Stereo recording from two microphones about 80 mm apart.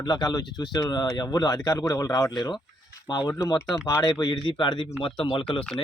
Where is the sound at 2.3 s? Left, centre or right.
Left.